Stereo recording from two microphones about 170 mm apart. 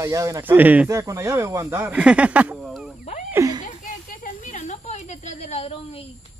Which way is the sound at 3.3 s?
20° right (ahead or behind).